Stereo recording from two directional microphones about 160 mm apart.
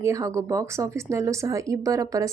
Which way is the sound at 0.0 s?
20° right (ahead or behind).